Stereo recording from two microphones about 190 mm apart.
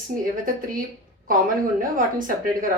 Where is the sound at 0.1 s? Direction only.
45° right (ahead or behind).